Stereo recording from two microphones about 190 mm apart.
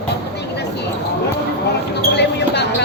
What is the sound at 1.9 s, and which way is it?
Basketball bounce, 60° left (ahead or behind).